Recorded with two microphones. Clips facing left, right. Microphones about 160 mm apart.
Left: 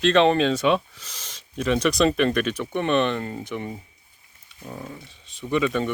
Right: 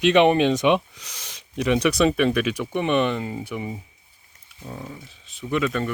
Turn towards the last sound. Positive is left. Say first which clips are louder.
# left 1 dB
turn(degrees=0)  # may be behind; listen again after turning